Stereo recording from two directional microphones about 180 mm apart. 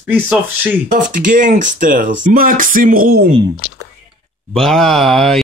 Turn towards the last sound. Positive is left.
turn(degrees=0)  # may be behind; listen again after turning